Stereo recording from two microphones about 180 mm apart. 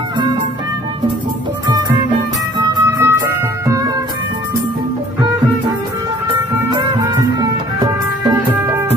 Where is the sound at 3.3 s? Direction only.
15° right (ahead or behind).